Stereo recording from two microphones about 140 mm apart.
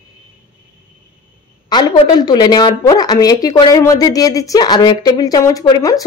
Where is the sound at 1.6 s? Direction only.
30° left (ahead or behind).